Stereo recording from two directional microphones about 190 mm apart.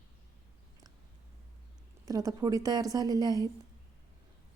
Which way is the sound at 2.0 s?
20° right (ahead or behind).